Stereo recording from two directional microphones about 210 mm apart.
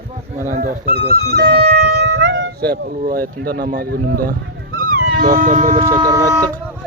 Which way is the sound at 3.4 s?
50° right (ahead or behind).